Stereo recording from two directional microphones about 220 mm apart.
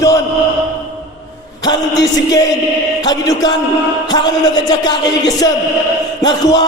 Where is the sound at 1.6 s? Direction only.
15° left (ahead or behind).